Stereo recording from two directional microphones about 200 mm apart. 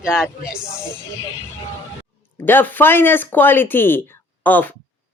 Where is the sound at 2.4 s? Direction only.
10° left (ahead or behind).